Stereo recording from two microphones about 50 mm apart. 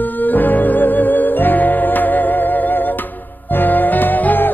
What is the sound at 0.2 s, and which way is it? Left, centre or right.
Music, left.